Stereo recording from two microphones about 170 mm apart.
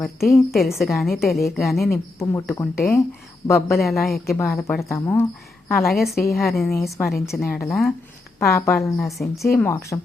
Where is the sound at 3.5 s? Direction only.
15° left (ahead or behind).